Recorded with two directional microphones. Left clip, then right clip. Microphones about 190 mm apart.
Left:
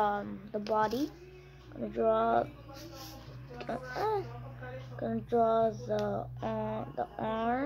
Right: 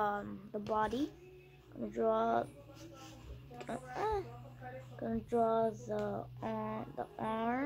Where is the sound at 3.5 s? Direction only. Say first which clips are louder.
Left 5 dB; 15° right (ahead or behind).